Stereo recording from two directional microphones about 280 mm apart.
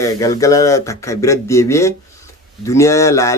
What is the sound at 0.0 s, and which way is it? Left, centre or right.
A man's voice, centre.